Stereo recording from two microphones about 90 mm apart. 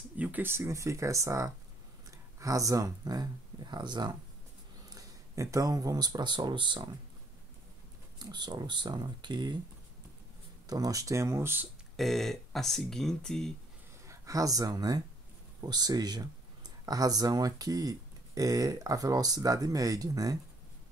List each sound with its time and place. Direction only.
0.2 s speech: 20° right (ahead or behind); by 4.2 s 55° right (ahead or behind)
4.8 s speech: 40° right (ahead or behind); by 6.9 s 65° right (ahead or behind)
8.2 s speech: 50° right (ahead or behind)
10.7 s speech: 45° right (ahead or behind); by 11.6 s 30° right (ahead or behind)
12.0 s speech: centre (ahead or behind)
14.0 s speech: 35° right (ahead or behind)